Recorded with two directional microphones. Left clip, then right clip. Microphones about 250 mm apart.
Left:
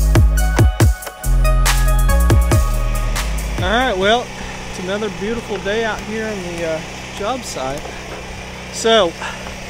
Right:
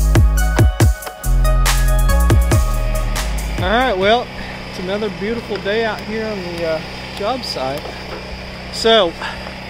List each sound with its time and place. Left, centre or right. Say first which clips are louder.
0.1 s music: even; centre
3.6 s music: right 1 dB; centre
4.8 s speech: right 1 dB; centre
6.3 s speech: right 3 dB; left
8.7 s speech: right 1 dB; centre